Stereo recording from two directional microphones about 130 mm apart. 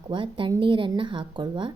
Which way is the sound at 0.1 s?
40° right (ahead or behind).